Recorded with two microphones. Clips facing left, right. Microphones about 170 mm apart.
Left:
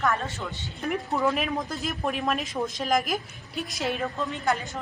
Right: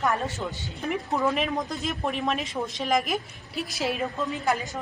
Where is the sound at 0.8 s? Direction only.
Centre (ahead or behind).